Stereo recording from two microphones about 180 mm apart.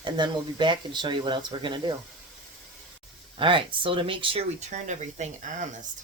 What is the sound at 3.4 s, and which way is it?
Speech, 30° right (ahead or behind).